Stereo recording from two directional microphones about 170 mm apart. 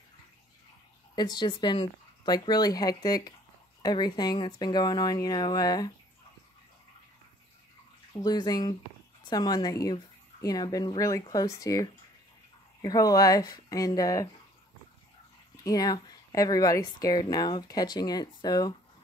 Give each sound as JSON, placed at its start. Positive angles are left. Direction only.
{"t": 1.1, "sound": "speech", "side_deg": 25}
{"t": 8.2, "sound": "speech", "side_deg": 25}
{"t": 15.6, "sound": "speech", "side_deg": 20}